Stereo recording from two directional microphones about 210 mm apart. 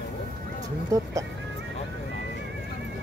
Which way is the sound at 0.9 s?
15° right (ahead or behind).